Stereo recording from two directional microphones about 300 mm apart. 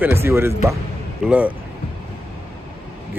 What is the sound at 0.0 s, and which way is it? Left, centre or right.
Speech, centre.